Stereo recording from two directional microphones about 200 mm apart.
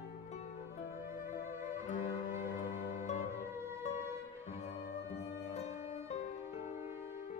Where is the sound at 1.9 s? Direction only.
40° left (ahead or behind).